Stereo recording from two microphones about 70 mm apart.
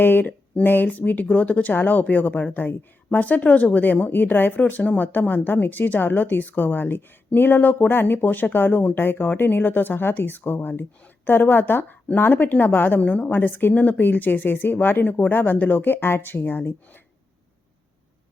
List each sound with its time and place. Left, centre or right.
0.0 s speech: left